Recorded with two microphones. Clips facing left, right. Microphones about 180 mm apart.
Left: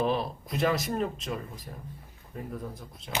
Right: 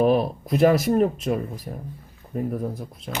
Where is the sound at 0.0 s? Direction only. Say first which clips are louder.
Right 9 dB; 55° right (ahead or behind).